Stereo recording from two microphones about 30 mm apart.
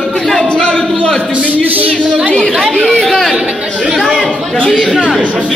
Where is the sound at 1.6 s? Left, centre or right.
Right.